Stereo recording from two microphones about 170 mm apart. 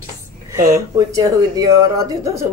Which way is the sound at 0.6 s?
20° right (ahead or behind).